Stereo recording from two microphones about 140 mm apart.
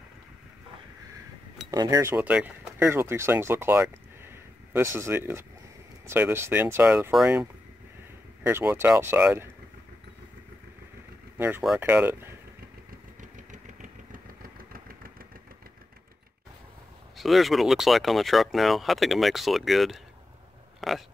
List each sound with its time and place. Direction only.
1.7 s speech: 25° right (ahead or behind)
2.1 s speech: 10° right (ahead or behind)
8.5 s speech: 15° right (ahead or behind)
11.3 s speech: 15° right (ahead or behind)
13.2 s vehicle: 65° right (ahead or behind); by 15.1 s 90° right
17.2 s speech: centre (ahead or behind)